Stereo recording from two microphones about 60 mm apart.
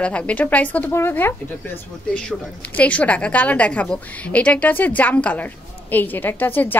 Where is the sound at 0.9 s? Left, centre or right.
Left.